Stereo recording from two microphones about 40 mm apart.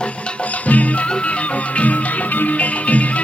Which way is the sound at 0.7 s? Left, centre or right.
Left.